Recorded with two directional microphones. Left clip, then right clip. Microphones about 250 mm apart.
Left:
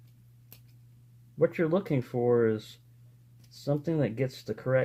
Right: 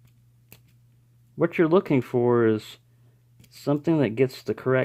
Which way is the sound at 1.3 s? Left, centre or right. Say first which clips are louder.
Right 6 dB; right.